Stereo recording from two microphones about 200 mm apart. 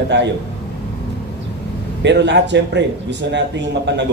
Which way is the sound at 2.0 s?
60° right (ahead or behind).